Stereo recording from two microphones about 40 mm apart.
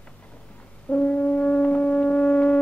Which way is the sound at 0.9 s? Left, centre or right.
Left.